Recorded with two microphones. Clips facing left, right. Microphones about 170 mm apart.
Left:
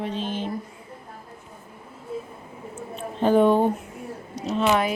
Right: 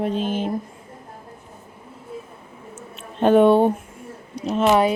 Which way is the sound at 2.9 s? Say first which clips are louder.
Right 4 dB; 75° right (ahead or behind).